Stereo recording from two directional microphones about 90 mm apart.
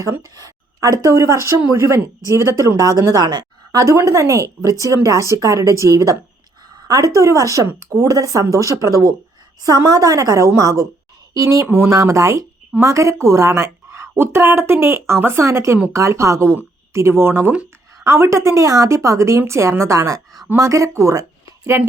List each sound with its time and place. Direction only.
0.2 s a woman's voice: 40° right (ahead or behind)